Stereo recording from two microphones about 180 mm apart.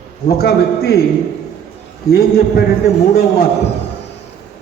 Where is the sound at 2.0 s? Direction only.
60° left (ahead or behind).